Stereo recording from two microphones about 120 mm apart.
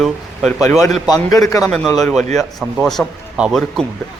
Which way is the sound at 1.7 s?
5° left (ahead or behind).